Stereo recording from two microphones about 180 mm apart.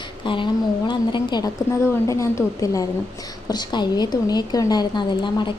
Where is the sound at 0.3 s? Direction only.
25° left (ahead or behind).